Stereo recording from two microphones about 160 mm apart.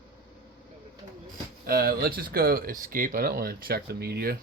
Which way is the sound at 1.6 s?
70° right (ahead or behind).